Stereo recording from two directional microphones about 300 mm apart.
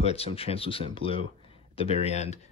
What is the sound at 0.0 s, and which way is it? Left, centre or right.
Speech, centre.